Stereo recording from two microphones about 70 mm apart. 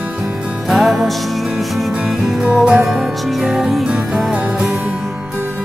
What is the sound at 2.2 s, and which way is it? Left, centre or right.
Music, centre.